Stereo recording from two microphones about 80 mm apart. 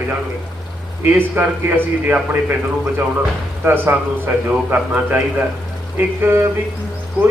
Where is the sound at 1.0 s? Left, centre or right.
Right.